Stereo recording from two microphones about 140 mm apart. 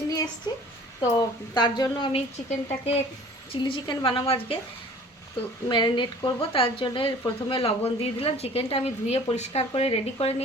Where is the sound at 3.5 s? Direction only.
35° left (ahead or behind).